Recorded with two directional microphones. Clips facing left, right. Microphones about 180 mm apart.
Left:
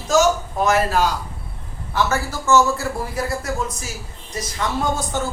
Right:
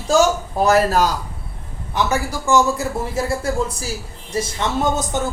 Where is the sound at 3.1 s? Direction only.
25° right (ahead or behind).